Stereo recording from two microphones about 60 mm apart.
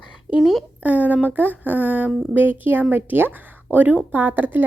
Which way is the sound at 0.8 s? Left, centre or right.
Right.